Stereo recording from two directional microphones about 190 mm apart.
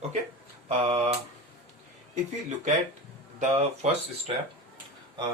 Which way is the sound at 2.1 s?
40° right (ahead or behind).